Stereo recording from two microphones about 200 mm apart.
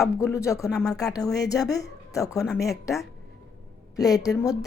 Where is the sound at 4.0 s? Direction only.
20° left (ahead or behind).